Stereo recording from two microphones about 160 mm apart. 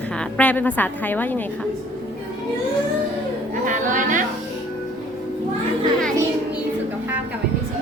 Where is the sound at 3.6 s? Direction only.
50° right (ahead or behind).